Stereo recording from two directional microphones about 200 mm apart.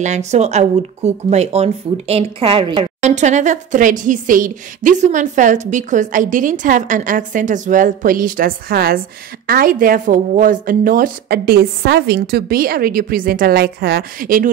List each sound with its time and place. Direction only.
0.0 s speech: 35° right (ahead or behind)